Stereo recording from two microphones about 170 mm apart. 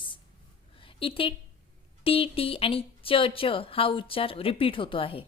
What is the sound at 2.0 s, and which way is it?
A woman's voice, 35° left (ahead or behind).